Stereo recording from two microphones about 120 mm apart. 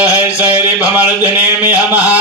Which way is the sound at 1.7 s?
10° right (ahead or behind).